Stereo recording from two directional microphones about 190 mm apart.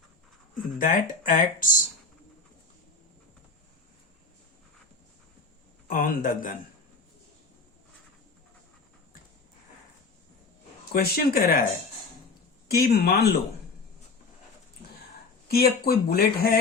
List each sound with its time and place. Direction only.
0.8 s speech: 45° left (ahead or behind)
5.9 s speech: 45° left (ahead or behind)
10.9 s speech: 55° left (ahead or behind)
12.6 s speech: 55° left (ahead or behind)
15.4 s speech: 55° left (ahead or behind)